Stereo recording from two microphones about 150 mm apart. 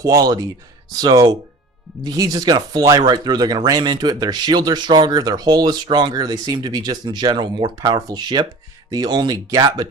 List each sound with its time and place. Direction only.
0.0 s speech: 25° right (ahead or behind)